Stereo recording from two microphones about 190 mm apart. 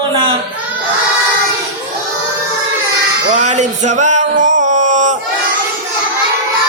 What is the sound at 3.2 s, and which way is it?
Music, 40° right (ahead or behind).